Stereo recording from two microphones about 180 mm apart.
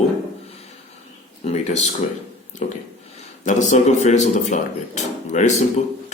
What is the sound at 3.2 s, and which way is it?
Speech, 40° left (ahead or behind).